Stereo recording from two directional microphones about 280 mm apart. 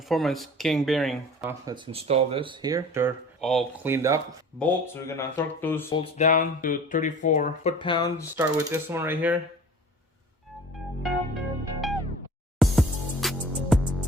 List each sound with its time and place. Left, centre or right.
0.1 s speech: centre
4.9 s speech: centre
5.9 s speech: left
8.4 s speech: centre
11.3 s music: centre